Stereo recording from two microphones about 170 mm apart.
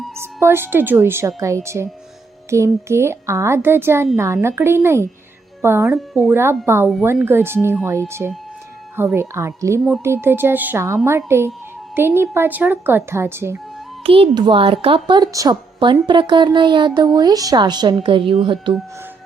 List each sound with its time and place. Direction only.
0.2 s speech: 15° right (ahead or behind)
5.9 s speech: 5° right (ahead or behind)
6.3 s speech: 15° right (ahead or behind)
14.0 s speech: 35° right (ahead or behind)